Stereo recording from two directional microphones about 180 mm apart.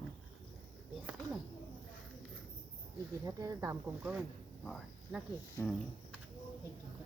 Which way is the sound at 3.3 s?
20° right (ahead or behind).